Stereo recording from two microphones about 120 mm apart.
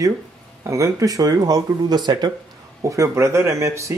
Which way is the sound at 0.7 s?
25° right (ahead or behind).